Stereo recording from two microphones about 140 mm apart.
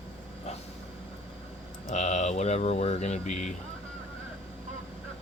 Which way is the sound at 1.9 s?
55° left (ahead or behind).